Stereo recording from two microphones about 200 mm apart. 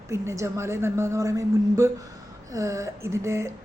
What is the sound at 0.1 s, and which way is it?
Speech, 15° right (ahead or behind).